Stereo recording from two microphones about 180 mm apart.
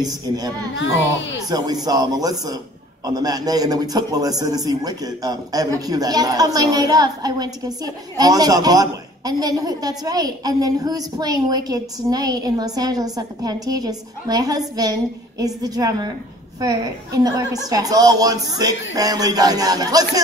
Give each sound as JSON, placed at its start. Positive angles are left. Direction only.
{"t": 0.0, "sound": "a woman's voice", "side_deg": -20}
{"t": 0.7, "sound": "a child's voice", "side_deg": 90}
{"t": 1.9, "sound": "a woman's voice", "side_deg": -20}